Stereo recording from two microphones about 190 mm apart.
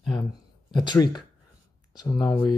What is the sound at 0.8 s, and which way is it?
Speech, 20° left (ahead or behind).